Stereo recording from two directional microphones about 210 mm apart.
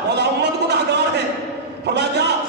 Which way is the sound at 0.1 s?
55° right (ahead or behind).